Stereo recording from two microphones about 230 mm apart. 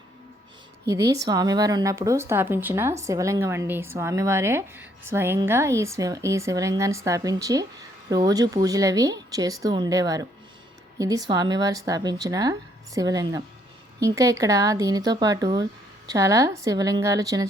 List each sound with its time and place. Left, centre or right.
0.9 s speech: centre